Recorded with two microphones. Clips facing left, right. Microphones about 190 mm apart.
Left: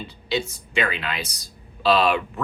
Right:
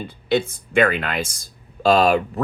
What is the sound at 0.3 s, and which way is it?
Speech, 55° right (ahead or behind).